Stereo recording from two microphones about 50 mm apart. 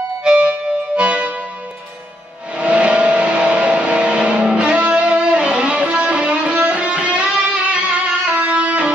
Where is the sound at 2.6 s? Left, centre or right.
Right.